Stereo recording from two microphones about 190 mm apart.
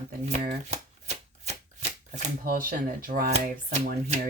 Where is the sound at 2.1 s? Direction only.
50° right (ahead or behind).